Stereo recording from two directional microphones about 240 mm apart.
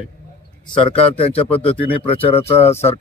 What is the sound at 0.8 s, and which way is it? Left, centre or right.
Speech, left.